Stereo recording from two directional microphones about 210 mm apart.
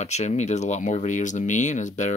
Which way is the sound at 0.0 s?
35° left (ahead or behind).